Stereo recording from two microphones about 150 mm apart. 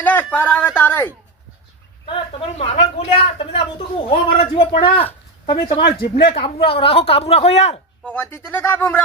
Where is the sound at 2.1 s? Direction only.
35° left (ahead or behind).